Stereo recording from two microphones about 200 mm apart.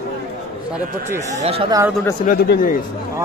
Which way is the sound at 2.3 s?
45° left (ahead or behind).